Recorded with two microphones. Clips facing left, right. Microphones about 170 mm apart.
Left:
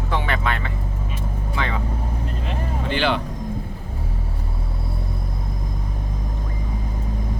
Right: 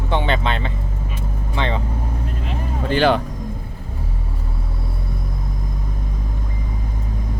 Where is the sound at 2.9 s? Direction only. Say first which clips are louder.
Right 6 dB; 40° right (ahead or behind).